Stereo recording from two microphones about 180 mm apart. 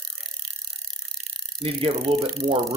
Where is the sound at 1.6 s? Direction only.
30° right (ahead or behind).